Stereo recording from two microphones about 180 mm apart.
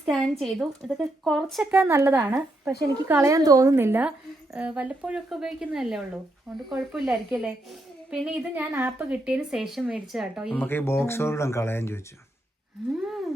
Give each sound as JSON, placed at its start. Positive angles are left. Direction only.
{"t": 0.0, "sound": "a woman's voice", "side_deg": 0}
{"t": 1.8, "sound": "a woman's voice", "side_deg": -15}
{"t": 10.5, "sound": "speech", "side_deg": 10}
{"t": 12.8, "sound": "a woman's voice", "side_deg": 0}